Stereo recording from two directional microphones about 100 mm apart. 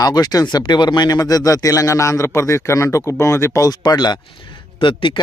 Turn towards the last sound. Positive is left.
turn(degrees=55)  # may be behind; listen again after turning